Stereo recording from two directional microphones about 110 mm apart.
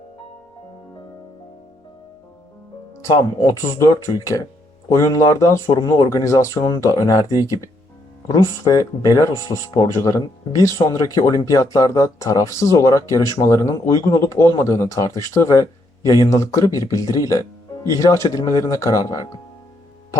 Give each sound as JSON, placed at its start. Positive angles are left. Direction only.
{"t": 3.0, "sound": "speech", "side_deg": 30}
{"t": 5.7, "sound": "speech", "side_deg": 45}
{"t": 6.1, "sound": "speech", "side_deg": 30}